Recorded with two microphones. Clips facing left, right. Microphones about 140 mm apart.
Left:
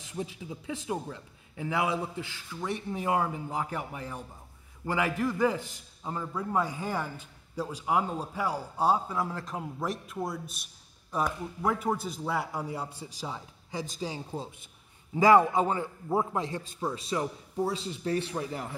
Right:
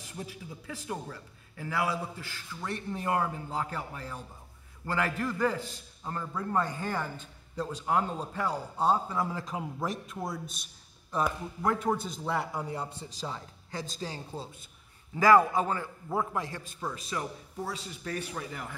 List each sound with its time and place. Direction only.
0.0 s a man's voice: 20° left (ahead or behind)